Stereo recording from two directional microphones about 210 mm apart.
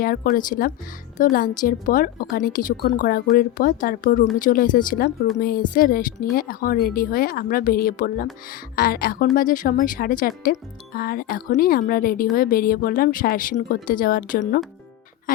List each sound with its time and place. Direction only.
0.0 s a woman's voice: 40° left (ahead or behind)